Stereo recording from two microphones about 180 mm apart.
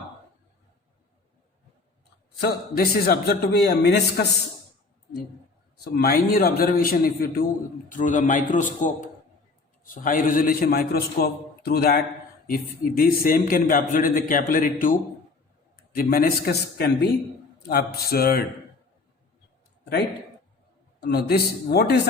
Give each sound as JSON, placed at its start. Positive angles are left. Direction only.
{"t": 2.4, "sound": "a man's voice", "side_deg": 60}
{"t": 5.8, "sound": "a man's voice", "side_deg": 55}
{"t": 7.9, "sound": "a man's voice", "side_deg": 45}
{"t": 21.0, "sound": "a man's voice", "side_deg": 60}